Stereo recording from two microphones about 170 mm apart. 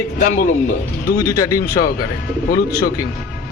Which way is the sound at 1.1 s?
20° left (ahead or behind).